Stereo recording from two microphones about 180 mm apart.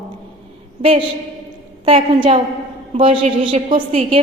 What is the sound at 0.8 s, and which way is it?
A man's voice, 30° right (ahead or behind).